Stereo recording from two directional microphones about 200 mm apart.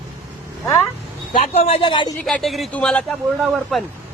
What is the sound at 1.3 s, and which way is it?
Speech, 30° left (ahead or behind).